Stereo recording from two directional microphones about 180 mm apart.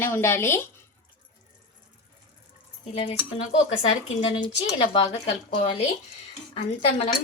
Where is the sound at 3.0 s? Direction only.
35° left (ahead or behind).